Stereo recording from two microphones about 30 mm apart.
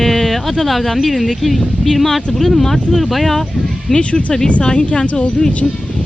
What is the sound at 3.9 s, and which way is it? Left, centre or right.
Speech, centre.